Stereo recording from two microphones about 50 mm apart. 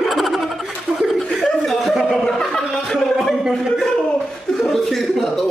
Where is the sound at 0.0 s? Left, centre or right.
Centre.